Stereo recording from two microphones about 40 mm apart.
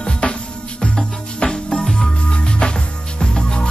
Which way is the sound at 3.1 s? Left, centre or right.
Left.